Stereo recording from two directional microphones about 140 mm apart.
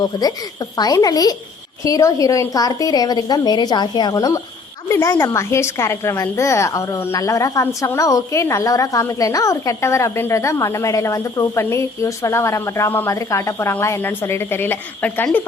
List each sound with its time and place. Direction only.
0.0 s a woman's voice: 30° left (ahead or behind); by 15.4 s 15° left (ahead or behind)